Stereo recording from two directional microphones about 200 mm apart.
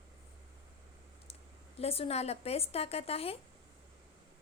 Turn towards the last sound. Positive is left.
turn(degrees=30)  # may be behind; listen again after turning